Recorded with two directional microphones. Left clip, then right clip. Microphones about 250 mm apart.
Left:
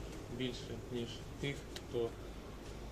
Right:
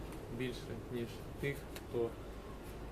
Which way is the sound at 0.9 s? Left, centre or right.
Centre.